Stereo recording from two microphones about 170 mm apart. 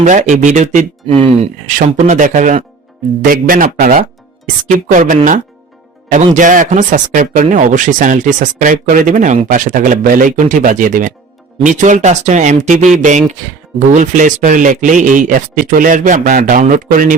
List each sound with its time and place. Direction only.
0.0 s a man's voice: 45° right (ahead or behind)